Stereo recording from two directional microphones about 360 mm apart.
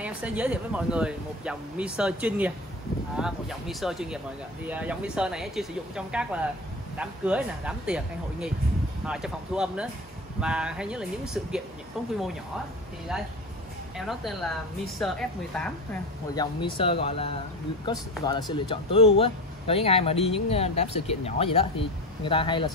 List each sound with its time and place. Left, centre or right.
0.0 s speech: centre
13.1 s speech: centre
16.7 s speech: centre